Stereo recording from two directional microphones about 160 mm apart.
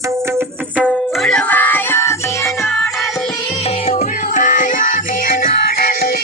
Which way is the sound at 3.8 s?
45° left (ahead or behind).